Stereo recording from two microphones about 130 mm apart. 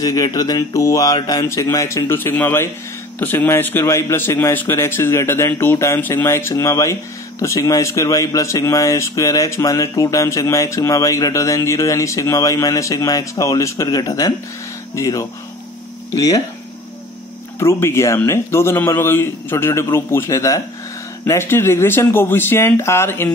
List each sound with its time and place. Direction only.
0.0 s a man's voice: 25° left (ahead or behind)
17.6 s a man's voice: 20° left (ahead or behind)